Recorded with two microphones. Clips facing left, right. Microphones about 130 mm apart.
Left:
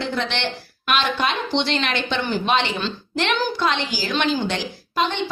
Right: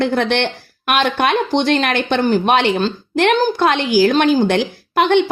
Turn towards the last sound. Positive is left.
turn(degrees=-60)  # may be behind; listen again after turning